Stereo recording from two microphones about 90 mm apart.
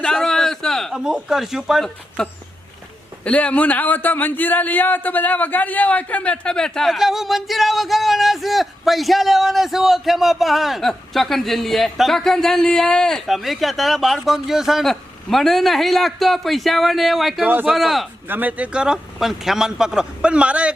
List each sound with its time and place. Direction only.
0.0 s a sound: 5° left (ahead or behind)
1.0 s a man's voice: 5° right (ahead or behind)
2.2 s a man's voice: 10° left (ahead or behind)
17.4 s a man's voice: 20° right (ahead or behind)
17.7 s a man's voice: centre (ahead or behind)
18.3 s a man's voice: 20° right (ahead or behind)